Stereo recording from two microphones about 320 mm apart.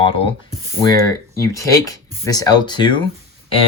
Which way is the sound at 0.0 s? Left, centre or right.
Centre.